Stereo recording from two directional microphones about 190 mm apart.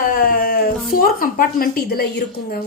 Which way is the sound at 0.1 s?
50° left (ahead or behind).